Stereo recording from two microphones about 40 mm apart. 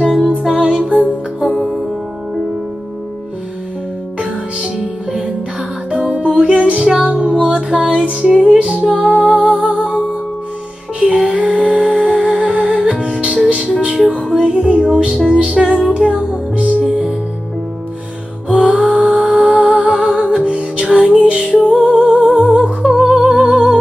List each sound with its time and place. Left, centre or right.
0.0 s music: centre
5.9 s music: right
6.8 s music: centre
7.2 s music: right
11.2 s music: right
14.0 s music: left
14.3 s music: right
18.6 s music: right
22.8 s music: centre
23.1 s music: right